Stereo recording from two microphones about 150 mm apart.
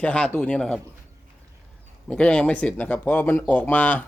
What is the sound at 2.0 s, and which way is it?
A man's voice, 5° left (ahead or behind).